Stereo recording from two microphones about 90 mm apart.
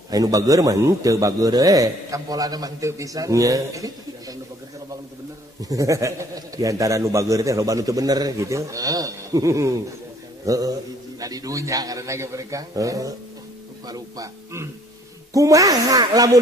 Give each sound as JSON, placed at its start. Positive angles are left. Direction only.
{"t": 0.1, "sound": "a man's voice", "side_deg": -40}
{"t": 5.6, "sound": "a man's voice", "side_deg": -40}